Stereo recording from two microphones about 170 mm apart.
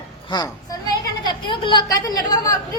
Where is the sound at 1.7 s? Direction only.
25° left (ahead or behind).